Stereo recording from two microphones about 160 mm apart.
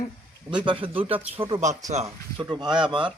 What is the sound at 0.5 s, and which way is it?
A man's voice, 30° right (ahead or behind).